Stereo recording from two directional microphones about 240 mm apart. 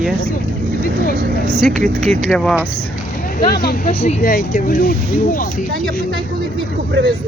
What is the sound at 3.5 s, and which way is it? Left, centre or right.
Speech, left.